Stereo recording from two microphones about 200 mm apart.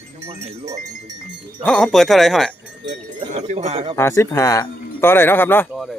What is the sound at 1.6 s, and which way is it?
Speech, 5° left (ahead or behind).